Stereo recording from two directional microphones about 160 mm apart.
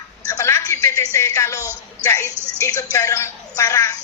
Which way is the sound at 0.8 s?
20° left (ahead or behind).